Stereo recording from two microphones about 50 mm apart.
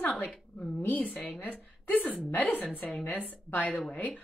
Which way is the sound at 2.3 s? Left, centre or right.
Left.